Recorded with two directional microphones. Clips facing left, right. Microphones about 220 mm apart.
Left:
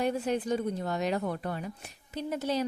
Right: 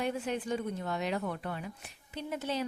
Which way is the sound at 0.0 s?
40° left (ahead or behind).